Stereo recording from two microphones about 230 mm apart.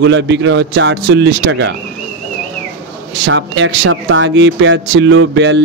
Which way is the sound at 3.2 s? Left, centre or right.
Right.